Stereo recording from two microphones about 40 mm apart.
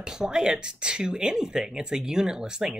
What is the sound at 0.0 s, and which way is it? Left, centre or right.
Speech, centre.